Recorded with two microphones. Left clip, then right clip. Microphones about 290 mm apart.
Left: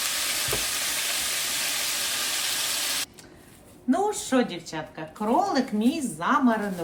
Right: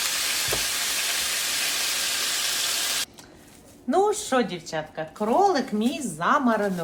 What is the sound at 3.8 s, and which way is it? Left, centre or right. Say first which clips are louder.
Speech: right 3 dB; centre.